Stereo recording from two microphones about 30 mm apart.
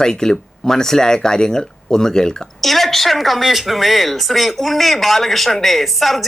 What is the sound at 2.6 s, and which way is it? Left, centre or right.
Speech, centre.